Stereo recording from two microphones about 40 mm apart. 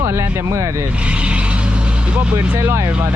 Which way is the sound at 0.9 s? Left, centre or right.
Right.